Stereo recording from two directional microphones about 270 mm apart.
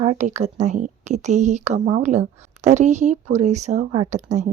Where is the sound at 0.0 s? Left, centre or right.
Right.